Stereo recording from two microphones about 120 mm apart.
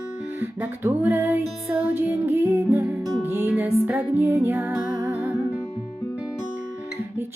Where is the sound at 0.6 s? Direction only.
15° right (ahead or behind).